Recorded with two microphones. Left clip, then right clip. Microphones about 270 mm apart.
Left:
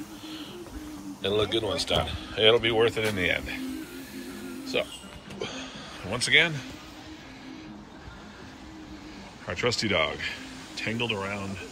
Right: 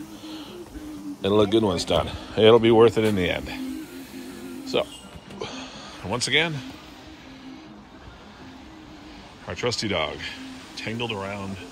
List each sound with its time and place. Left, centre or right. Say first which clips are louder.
1.2 s speech: right 6 dB; centre
5.4 s music: right 1 dB; centre
9.5 s speech: even; centre